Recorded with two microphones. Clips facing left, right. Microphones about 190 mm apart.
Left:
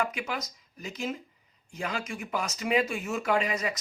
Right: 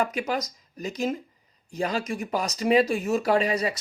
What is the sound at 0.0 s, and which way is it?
Speech, 40° right (ahead or behind).